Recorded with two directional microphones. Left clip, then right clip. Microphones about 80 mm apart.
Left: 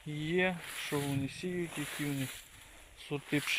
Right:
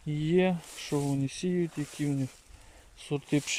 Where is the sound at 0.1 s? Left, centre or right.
Right.